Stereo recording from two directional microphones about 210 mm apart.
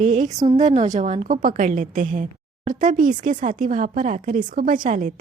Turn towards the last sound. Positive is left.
turn(degrees=-40)  # may be behind; listen again after turning